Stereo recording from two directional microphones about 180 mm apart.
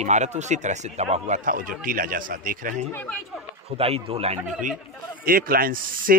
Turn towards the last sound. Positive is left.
turn(degrees=-50)  # may be behind; listen again after turning